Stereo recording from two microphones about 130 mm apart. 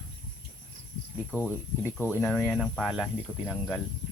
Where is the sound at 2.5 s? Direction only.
5° left (ahead or behind).